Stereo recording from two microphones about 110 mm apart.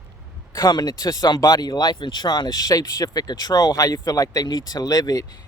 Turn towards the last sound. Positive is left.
turn(degrees=35)  # may be behind; listen again after turning